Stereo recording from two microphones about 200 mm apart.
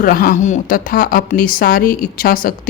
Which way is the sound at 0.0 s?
45° left (ahead or behind).